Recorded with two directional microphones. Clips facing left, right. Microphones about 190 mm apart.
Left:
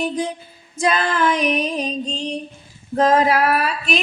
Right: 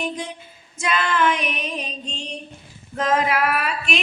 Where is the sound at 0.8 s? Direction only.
35° left (ahead or behind).